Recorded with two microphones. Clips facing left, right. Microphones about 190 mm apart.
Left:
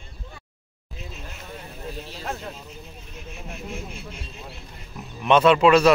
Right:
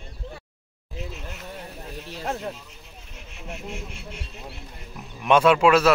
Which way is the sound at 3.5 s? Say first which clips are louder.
Even; 70° right (ahead or behind).